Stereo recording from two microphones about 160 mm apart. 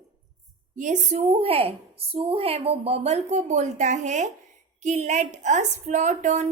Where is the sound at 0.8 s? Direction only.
50° right (ahead or behind).